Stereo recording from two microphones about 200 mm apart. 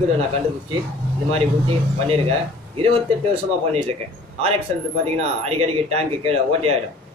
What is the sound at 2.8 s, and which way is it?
Speech, 30° right (ahead or behind).